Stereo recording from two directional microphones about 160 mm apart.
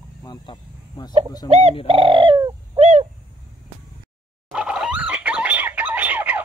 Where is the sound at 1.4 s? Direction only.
45° right (ahead or behind).